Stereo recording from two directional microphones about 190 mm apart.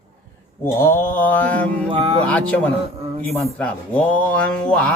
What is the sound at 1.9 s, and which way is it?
Speech, 30° right (ahead or behind).